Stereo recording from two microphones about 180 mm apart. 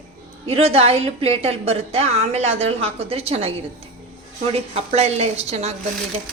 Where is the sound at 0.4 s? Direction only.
35° right (ahead or behind).